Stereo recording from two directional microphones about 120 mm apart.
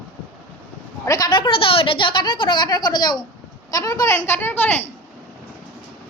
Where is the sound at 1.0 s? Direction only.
35° left (ahead or behind); by 4.9 s 15° left (ahead or behind).